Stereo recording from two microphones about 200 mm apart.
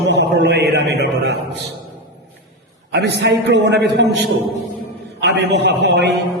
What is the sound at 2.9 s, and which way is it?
A man's voice, 55° right (ahead or behind).